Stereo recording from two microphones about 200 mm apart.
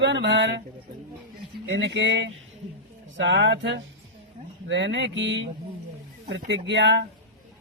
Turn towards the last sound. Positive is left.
turn(degrees=-65)  # may be behind; listen again after turning